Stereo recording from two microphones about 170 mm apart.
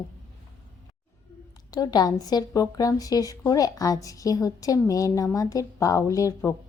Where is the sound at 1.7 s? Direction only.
25° left (ahead or behind).